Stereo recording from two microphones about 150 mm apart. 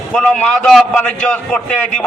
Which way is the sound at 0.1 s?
5° left (ahead or behind).